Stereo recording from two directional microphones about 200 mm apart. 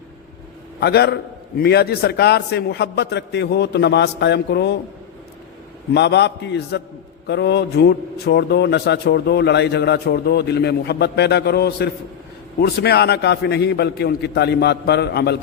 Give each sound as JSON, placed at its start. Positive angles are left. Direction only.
{"t": 0.8, "sound": "a man's voice", "side_deg": 55}
{"t": 5.9, "sound": "a man's voice", "side_deg": 60}